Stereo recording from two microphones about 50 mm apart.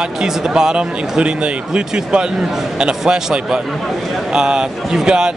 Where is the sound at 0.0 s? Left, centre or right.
Centre.